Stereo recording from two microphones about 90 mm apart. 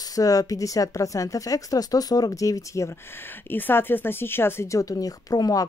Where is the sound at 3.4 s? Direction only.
20° left (ahead or behind); by 5.7 s 40° left (ahead or behind).